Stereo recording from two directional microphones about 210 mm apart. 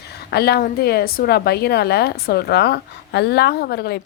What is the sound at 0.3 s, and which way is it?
A woman's voice, 50° left (ahead or behind).